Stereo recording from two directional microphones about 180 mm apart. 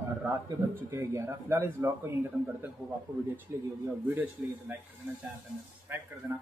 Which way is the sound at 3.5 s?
15° right (ahead or behind).